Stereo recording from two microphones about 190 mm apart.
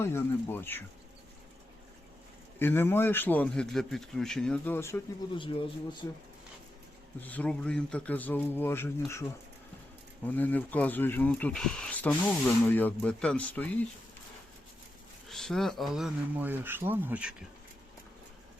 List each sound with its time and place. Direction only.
0.0 s speech: 10° left (ahead or behind)
2.6 s speech: 10° left (ahead or behind)
5.4 s speech: 25° left (ahead or behind)
7.2 s speech: 10° left (ahead or behind)
10.2 s speech: 10° left (ahead or behind)
15.3 s speech: centre (ahead or behind)